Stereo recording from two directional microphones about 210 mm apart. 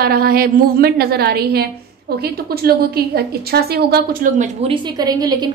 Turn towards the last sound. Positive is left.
turn(degrees=-20)  # may be behind; listen again after turning